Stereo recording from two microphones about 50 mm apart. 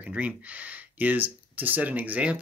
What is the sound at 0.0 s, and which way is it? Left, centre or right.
Speech, right.